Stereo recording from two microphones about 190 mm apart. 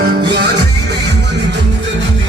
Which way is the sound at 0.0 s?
55° right (ahead or behind).